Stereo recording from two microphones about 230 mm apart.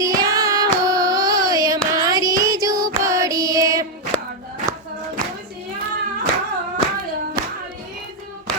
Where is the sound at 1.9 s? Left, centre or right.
Centre.